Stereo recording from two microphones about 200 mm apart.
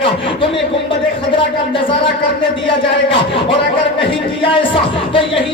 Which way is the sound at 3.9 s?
25° left (ahead or behind).